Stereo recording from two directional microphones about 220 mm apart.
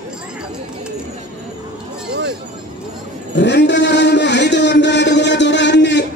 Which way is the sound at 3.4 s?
50° left (ahead or behind).